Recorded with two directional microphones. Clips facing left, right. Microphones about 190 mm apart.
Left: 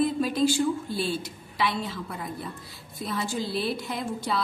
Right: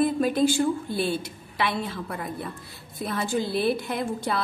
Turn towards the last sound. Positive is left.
turn(degrees=-55)  # may be behind; listen again after turning